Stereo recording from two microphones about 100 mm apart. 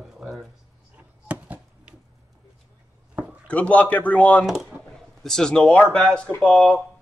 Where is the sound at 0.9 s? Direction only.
15° right (ahead or behind).